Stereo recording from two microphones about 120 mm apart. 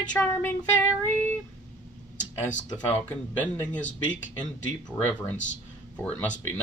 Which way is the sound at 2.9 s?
15° left (ahead or behind).